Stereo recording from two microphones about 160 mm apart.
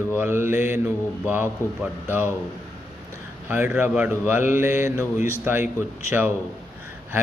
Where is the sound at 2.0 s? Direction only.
10° right (ahead or behind).